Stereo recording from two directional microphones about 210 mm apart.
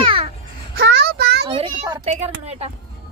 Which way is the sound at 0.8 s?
50° right (ahead or behind).